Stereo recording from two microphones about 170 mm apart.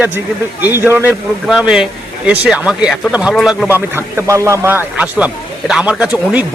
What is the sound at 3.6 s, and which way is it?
A man's voice, 10° right (ahead or behind).